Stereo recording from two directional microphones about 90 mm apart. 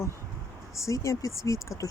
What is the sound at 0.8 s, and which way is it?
Speech, 35° left (ahead or behind).